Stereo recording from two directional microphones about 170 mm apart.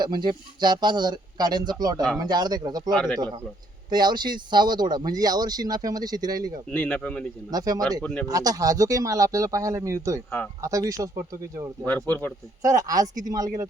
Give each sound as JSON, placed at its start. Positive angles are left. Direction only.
{"t": 0.0, "sound": "speech", "side_deg": -25}
{"t": 6.7, "sound": "speech", "side_deg": 10}
{"t": 7.5, "sound": "speech", "side_deg": -20}
{"t": 8.0, "sound": "speech", "side_deg": 5}
{"t": 8.3, "sound": "speech", "side_deg": -20}
{"t": 11.9, "sound": "speech", "side_deg": 10}
{"t": 12.6, "sound": "speech", "side_deg": -20}